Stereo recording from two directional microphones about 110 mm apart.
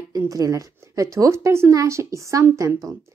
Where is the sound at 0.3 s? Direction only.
30° right (ahead or behind).